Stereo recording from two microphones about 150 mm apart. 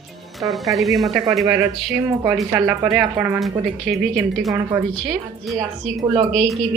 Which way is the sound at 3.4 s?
Centre (ahead or behind).